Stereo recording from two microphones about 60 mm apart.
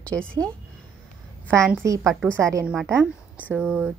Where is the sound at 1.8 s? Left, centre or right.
Right.